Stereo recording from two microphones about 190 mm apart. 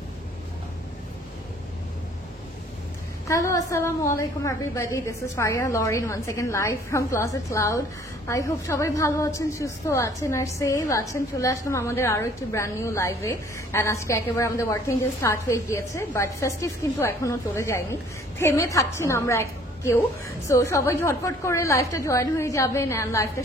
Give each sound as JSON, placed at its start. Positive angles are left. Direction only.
{"t": 3.3, "sound": "a woman's voice", "side_deg": 15}